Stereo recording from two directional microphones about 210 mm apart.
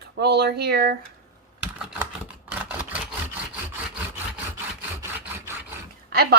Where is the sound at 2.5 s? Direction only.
10° right (ahead or behind).